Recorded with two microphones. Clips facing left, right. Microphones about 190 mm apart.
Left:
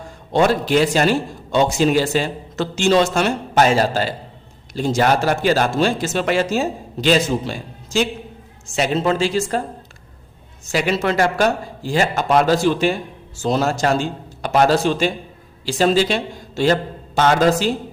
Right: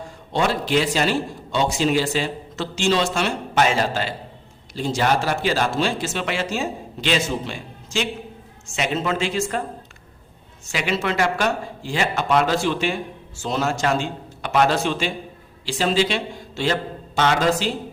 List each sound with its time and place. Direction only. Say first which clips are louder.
0.3 s a man's voice: left 5 dB; 45° left (ahead or behind)
10.7 s a man's voice: left 5 dB; 40° left (ahead or behind)